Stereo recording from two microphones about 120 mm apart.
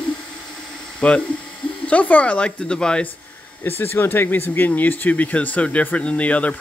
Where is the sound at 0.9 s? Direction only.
10° left (ahead or behind).